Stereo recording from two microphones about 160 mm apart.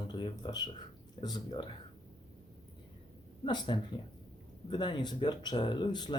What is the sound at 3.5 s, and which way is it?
Speech, 30° left (ahead or behind).